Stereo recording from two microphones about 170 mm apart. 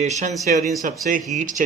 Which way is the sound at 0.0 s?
45° right (ahead or behind).